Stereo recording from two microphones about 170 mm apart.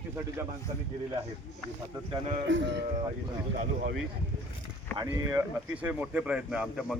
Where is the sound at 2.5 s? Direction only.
90° right.